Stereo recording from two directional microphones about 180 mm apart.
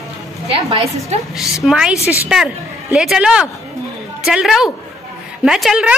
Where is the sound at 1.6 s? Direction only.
5° right (ahead or behind).